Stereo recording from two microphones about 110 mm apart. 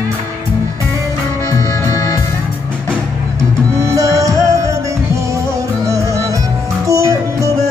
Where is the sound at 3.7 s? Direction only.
30° right (ahead or behind).